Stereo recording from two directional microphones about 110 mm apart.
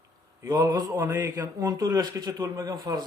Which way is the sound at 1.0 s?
35° right (ahead or behind).